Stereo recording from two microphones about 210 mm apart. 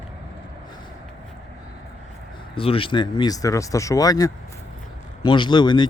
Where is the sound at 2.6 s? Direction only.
25° left (ahead or behind).